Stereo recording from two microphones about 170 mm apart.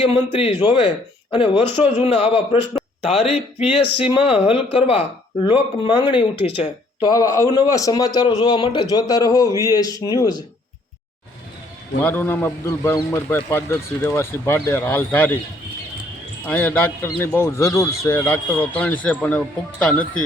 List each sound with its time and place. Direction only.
0.1 s a man's voice: 35° left (ahead or behind)
12.0 s speech: 10° left (ahead or behind)
16.5 s speech: 10° left (ahead or behind)